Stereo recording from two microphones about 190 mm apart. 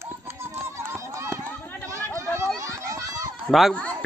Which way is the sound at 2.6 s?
15° right (ahead or behind).